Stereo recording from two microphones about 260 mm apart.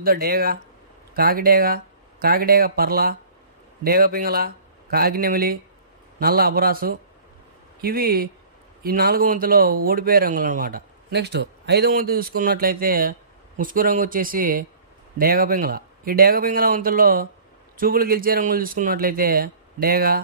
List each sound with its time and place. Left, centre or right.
0.0 s speech: right